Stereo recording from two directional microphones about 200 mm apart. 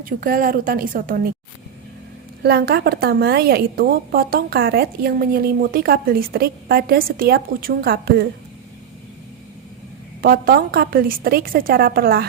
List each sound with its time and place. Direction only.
0.0 s a woman's voice: 45° right (ahead or behind)
2.4 s a woman's voice: 50° right (ahead or behind)
10.2 s a woman's voice: 45° right (ahead or behind)